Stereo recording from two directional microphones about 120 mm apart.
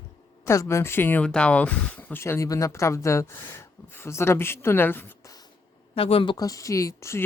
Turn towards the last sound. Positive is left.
turn(degrees=25)  # may be behind; listen again after turning